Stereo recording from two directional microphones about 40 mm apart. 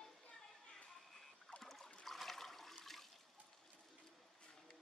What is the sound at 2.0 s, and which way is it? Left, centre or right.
Toilet flush, centre.